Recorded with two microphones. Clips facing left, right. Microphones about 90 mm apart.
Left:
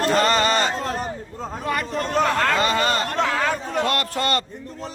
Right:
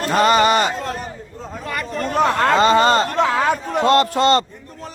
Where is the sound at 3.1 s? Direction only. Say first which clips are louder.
Right 4 dB; 15° right (ahead or behind).